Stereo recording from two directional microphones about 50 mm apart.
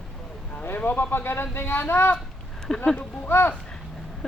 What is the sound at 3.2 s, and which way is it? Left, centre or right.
Speech, left.